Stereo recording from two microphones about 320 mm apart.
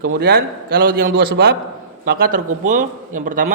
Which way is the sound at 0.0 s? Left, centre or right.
Right.